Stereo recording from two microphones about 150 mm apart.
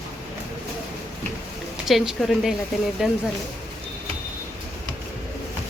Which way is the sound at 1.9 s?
Centre (ahead or behind).